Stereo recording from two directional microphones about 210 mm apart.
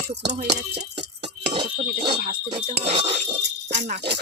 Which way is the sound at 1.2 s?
30° right (ahead or behind).